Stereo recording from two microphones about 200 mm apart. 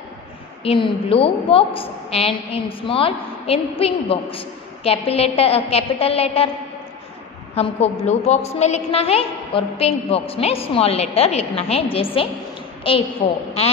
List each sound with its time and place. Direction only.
0.7 s a woman's voice: 25° left (ahead or behind)
7.5 s a woman's voice: 30° left (ahead or behind)